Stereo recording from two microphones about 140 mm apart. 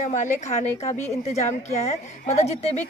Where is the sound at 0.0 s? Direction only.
60° left (ahead or behind).